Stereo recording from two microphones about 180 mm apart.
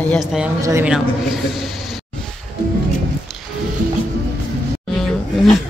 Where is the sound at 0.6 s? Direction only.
15° right (ahead or behind).